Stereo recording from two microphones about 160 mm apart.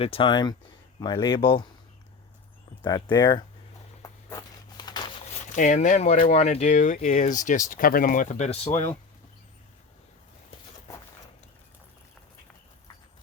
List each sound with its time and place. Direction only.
0.0 s speech: 35° left (ahead or behind)
2.8 s speech: 25° left (ahead or behind)
4.8 s a sound: 25° left (ahead or behind)
5.2 s speech: 50° left (ahead or behind)